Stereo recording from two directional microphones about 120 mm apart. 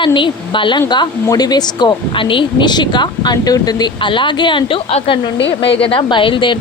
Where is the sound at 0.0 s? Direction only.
40° left (ahead or behind).